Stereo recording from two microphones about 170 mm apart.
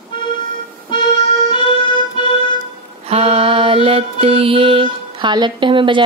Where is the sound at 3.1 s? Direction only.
35° right (ahead or behind).